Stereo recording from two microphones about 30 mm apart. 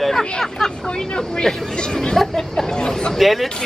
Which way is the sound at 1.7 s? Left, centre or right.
Left.